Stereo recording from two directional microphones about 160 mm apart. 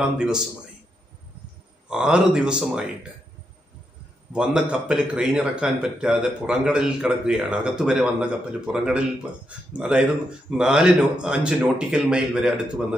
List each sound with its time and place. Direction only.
0.0 s a man's voice: 5° right (ahead or behind)
1.9 s a man's voice: 5° right (ahead or behind)
4.3 s a man's voice: 5° right (ahead or behind)